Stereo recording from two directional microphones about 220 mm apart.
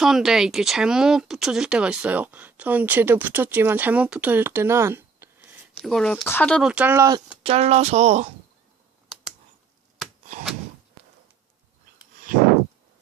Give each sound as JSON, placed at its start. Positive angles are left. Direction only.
{"t": 0.0, "sound": "speech", "side_deg": 0}
{"t": 7.4, "sound": "speech", "side_deg": -30}
{"t": 12.3, "sound": "a sound", "side_deg": -40}